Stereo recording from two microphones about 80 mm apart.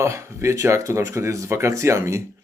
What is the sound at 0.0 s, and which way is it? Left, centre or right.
Speech, right.